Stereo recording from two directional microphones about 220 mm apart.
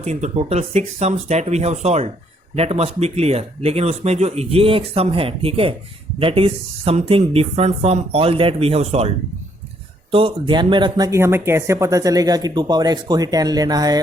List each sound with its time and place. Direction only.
0.0 s speech: 30° right (ahead or behind)